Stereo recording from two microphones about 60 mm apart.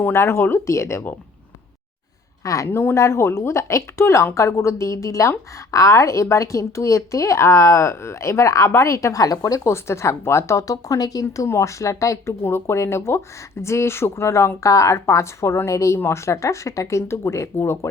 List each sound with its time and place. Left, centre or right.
0.1 s speech: left
2.4 s a woman's voice: left
2.6 s a woman's voice: left
9.7 s a woman's voice: left
11.4 s a woman's voice: left
12.4 s a woman's voice: left